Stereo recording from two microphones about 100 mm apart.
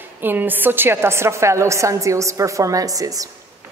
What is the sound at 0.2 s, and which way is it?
A woman's voice, 20° right (ahead or behind).